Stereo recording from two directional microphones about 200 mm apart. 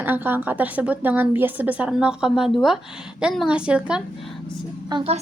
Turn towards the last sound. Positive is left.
turn(degrees=-25)  # may be behind; listen again after turning